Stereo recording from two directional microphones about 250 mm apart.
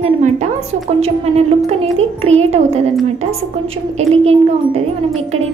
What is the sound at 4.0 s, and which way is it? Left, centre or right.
Speech, right.